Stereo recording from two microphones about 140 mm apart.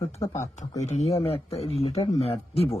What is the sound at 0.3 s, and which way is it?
Speech, 60° left (ahead or behind).